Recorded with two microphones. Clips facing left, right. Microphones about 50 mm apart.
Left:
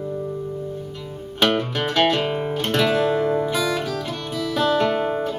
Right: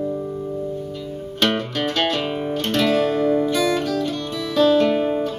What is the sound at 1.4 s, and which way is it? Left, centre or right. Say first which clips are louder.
Music: left 1 dB; centre.